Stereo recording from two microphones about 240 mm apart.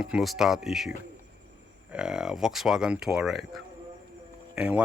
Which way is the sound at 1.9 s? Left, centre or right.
Centre.